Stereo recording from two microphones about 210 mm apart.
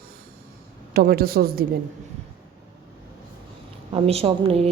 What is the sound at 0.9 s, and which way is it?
Speech, 45° right (ahead or behind).